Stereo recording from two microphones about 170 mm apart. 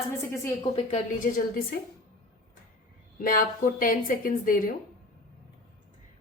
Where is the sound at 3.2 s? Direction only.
55° left (ahead or behind).